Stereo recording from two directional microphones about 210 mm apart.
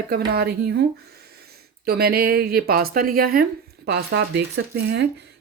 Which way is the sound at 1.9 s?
50° right (ahead or behind).